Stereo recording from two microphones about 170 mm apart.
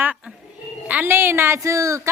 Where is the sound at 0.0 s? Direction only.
10° right (ahead or behind).